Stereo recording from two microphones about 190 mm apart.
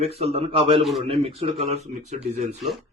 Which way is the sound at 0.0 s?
35° right (ahead or behind).